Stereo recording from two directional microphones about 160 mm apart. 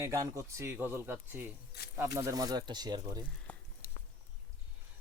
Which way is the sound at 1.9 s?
20° right (ahead or behind).